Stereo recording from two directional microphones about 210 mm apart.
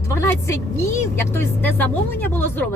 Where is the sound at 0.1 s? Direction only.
10° left (ahead or behind).